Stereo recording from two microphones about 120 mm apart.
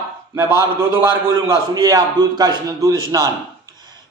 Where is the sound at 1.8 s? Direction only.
30° right (ahead or behind).